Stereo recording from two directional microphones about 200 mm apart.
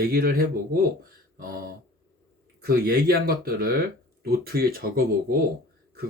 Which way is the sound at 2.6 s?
50° right (ahead or behind).